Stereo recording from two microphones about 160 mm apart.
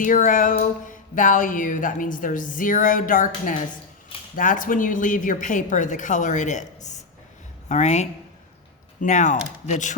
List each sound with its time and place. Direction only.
0.3 s a woman's voice: 55° left (ahead or behind)